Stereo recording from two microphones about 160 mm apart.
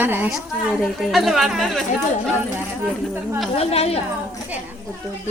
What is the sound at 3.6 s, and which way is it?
Speech, 40° left (ahead or behind).